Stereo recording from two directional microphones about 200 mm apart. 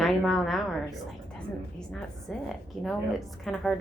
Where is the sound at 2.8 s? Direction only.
Centre (ahead or behind).